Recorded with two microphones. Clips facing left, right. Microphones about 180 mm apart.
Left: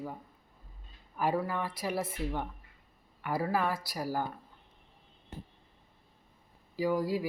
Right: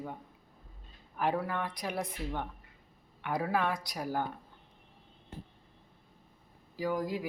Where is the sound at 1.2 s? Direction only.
5° left (ahead or behind).